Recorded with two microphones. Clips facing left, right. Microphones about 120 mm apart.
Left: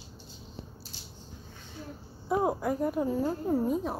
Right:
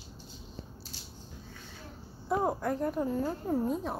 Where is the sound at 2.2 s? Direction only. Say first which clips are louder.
Left 2 dB; 5° left (ahead or behind).